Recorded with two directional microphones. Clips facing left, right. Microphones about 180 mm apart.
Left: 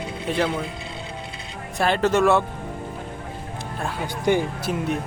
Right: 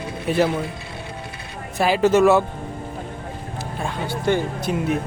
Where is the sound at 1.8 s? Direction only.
5° right (ahead or behind).